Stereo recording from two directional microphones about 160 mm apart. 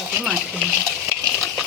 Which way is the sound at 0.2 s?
5° right (ahead or behind).